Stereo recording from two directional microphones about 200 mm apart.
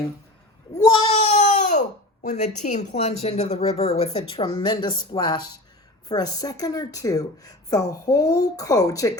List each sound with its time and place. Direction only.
0.8 s speech: 20° left (ahead or behind)
1.4 s baby cry: 40° left (ahead or behind)
2.2 s a woman's voice: 35° left (ahead or behind); by 9.1 s 15° left (ahead or behind)